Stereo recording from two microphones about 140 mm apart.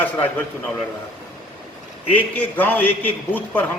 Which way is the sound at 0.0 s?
10° left (ahead or behind).